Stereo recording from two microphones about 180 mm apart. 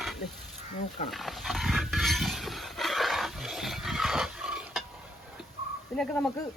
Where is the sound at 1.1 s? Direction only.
Centre (ahead or behind).